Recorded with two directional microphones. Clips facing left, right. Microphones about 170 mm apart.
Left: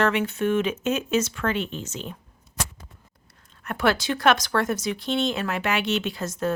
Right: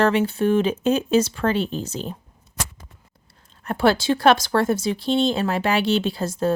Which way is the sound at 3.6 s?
30° right (ahead or behind).